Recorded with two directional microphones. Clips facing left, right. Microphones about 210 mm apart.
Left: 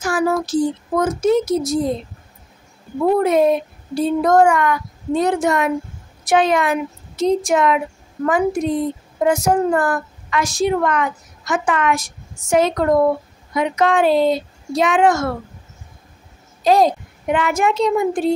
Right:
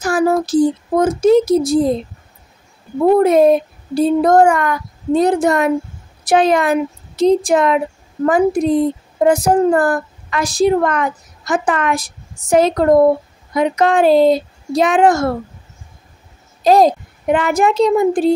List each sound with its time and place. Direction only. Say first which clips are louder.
0.0 s a child's voice: right 4 dB; 35° right (ahead or behind)
3.0 s a child's voice: right 4 dB; 40° right (ahead or behind)
16.6 s a child's voice: right 3 dB; 40° right (ahead or behind)